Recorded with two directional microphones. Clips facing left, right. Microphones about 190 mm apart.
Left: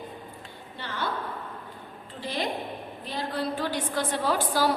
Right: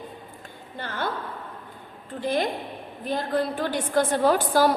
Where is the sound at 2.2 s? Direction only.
50° right (ahead or behind).